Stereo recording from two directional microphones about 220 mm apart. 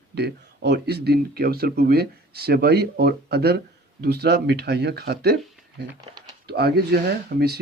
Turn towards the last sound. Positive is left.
turn(degrees=-45)  # may be behind; listen again after turning